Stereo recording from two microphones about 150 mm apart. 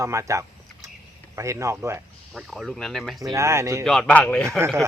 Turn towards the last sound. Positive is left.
turn(degrees=-15)  # may be behind; listen again after turning